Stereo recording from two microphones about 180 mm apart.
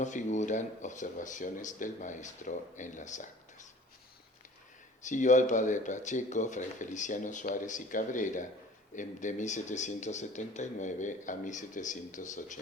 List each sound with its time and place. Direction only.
0.0 s speech: 45° left (ahead or behind)
5.0 s speech: 45° left (ahead or behind)